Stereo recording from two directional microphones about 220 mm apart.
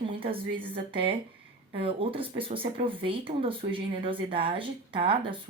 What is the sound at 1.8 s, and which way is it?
Speech, 25° right (ahead or behind).